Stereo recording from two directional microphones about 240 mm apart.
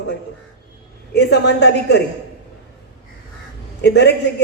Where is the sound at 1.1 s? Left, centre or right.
Left.